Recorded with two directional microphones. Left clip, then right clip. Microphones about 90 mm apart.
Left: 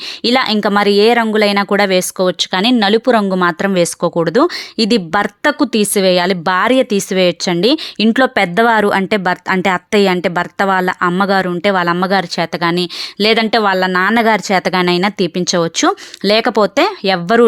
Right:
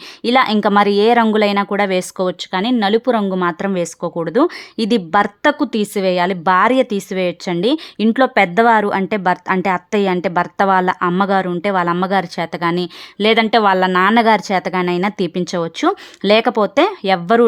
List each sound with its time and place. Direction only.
0.3 s a woman's voice: 10° left (ahead or behind)
2.4 s speech: 35° left (ahead or behind); by 5.5 s 15° left (ahead or behind)
5.5 s speech: 30° left (ahead or behind)
8.4 s a woman's voice: 20° left (ahead or behind)